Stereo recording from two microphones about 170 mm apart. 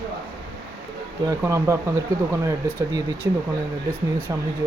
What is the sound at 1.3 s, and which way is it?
Speech, 15° right (ahead or behind).